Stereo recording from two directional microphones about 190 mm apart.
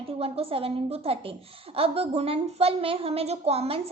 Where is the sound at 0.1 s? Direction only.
30° right (ahead or behind).